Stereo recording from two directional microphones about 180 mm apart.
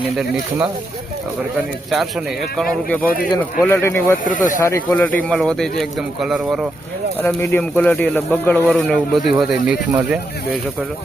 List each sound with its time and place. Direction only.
3.3 s speech: 15° left (ahead or behind)
4.3 s speech: 45° left (ahead or behind)
4.6 s speech: 15° left (ahead or behind); by 6.7 s 5° right (ahead or behind)
7.2 s speech: 10° left (ahead or behind); by 10.6 s 5° right (ahead or behind)